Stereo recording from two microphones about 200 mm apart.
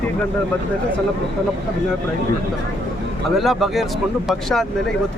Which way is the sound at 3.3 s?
Centre (ahead or behind).